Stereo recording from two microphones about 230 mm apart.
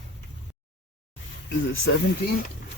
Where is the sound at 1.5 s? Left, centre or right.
Left.